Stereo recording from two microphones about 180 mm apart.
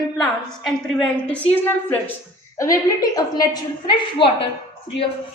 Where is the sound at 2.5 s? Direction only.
20° left (ahead or behind).